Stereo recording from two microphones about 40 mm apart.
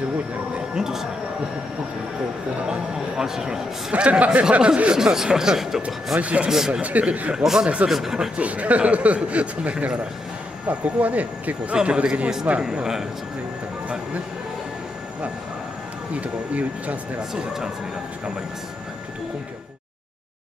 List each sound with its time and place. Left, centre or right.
0.7 s speech: centre
2.7 s speech: centre
3.9 s speech: right
4.9 s speech: centre
6.1 s speech: right
6.5 s speech: centre
6.8 s speech: right
7.4 s speech: centre
8.4 s speech: right
11.7 s speech: right
12.5 s speech: right
16.1 s speech: right